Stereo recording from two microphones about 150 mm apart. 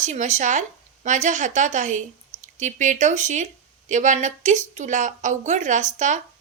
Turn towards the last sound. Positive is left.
turn(degrees=-55)  # may be behind; listen again after turning